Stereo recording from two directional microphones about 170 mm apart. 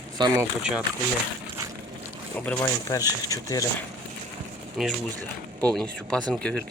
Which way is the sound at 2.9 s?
25° left (ahead or behind).